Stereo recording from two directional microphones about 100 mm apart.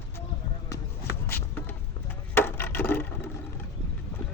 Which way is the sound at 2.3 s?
20° left (ahead or behind).